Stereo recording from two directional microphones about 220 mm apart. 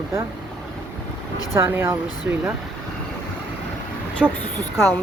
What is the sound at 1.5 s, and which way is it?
Speech, 10° right (ahead or behind).